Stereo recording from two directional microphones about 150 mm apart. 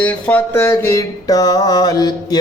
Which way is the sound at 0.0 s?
10° left (ahead or behind).